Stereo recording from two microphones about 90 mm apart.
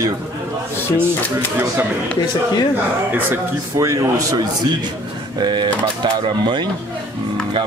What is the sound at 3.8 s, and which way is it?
A man's voice, 40° right (ahead or behind).